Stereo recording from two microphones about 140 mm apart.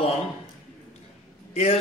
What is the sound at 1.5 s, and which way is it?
Speech, 45° left (ahead or behind).